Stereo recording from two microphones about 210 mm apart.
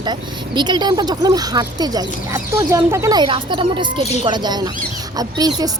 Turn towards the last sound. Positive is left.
turn(degrees=-20)  # may be behind; listen again after turning